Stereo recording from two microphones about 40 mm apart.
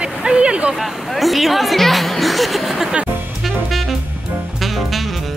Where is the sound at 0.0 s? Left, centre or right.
Right.